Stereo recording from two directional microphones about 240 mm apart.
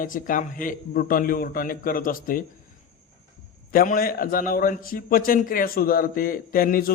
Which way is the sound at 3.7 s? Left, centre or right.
Left.